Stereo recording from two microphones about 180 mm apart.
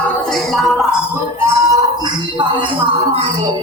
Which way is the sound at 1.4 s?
15° right (ahead or behind).